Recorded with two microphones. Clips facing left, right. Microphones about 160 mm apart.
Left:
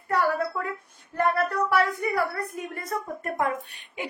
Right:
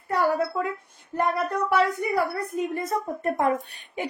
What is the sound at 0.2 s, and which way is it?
A woman's voice, 20° right (ahead or behind).